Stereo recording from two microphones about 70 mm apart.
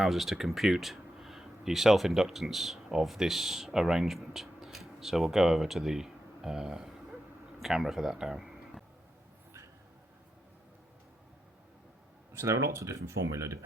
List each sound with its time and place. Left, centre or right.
0.0 s a man's voice: centre
12.4 s speech: right